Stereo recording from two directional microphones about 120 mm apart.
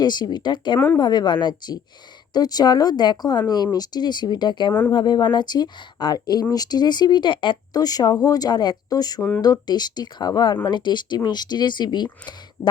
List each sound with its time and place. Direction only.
0.0 s speech: 35° left (ahead or behind)